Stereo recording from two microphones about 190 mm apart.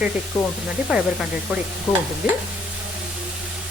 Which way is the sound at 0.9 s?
5° right (ahead or behind).